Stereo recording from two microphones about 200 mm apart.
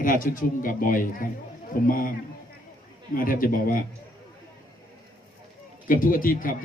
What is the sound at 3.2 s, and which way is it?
Speech, 45° left (ahead or behind).